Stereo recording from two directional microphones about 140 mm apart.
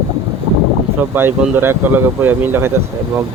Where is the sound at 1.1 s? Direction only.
15° right (ahead or behind).